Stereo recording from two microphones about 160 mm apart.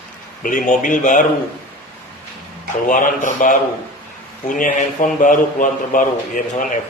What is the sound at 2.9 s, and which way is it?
A man's voice, 55° left (ahead or behind).